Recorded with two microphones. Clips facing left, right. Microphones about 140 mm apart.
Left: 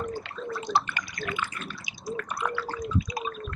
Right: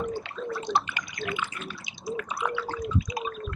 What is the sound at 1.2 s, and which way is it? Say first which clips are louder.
Water: right 1 dB; 15° right (ahead or behind).